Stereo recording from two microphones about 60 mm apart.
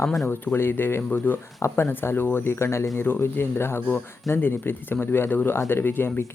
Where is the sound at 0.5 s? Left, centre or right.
Left.